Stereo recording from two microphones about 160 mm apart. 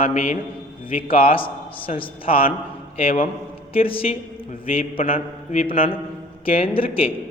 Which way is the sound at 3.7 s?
35° left (ahead or behind).